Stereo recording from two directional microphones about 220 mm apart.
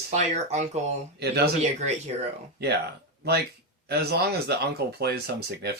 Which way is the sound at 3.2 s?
45° right (ahead or behind).